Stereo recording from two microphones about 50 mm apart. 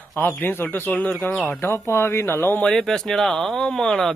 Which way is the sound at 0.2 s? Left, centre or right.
Left.